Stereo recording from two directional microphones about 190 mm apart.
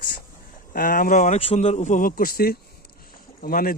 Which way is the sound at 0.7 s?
45° left (ahead or behind).